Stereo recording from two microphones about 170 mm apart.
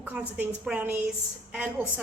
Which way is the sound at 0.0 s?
5° right (ahead or behind).